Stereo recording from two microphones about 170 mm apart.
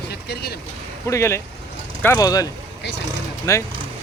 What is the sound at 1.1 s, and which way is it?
Speech, 15° left (ahead or behind).